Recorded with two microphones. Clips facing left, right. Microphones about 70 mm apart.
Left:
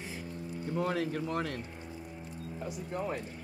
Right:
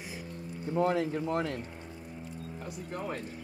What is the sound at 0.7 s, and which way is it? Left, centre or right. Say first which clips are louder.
Speech: right 4 dB; right.